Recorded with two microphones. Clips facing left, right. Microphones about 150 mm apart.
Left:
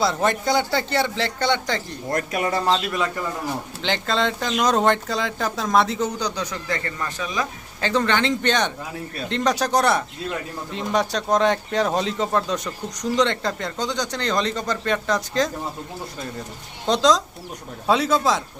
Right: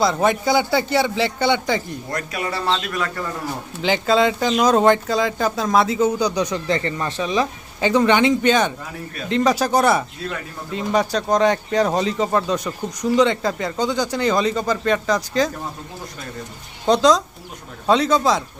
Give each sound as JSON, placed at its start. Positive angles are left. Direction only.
{"t": 0.0, "sound": "a man's voice", "side_deg": 0}
{"t": 2.0, "sound": "a man's voice", "side_deg": 45}
{"t": 3.8, "sound": "speech", "side_deg": -5}
{"t": 7.8, "sound": "a man's voice", "side_deg": -15}
{"t": 16.8, "sound": "speech", "side_deg": -5}